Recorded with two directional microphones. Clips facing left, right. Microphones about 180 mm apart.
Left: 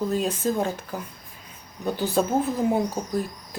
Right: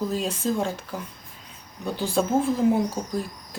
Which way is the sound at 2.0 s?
5° left (ahead or behind).